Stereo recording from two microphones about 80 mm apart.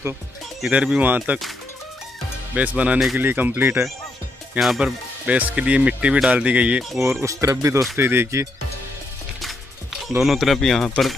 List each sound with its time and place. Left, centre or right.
0.6 s speech: centre
2.5 s speech: centre
4.6 s speech: centre
6.8 s speech: centre
7.1 s speech: right
10.2 s speech: centre